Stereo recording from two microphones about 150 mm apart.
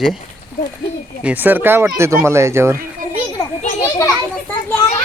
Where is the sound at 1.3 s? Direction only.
10° right (ahead or behind).